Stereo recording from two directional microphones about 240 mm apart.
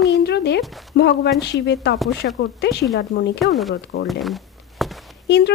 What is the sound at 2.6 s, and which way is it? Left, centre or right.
Speech, left.